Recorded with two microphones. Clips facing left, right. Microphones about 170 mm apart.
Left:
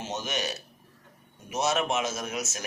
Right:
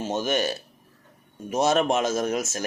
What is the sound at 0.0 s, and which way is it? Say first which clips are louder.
Speech: right 8 dB; 50° right (ahead or behind).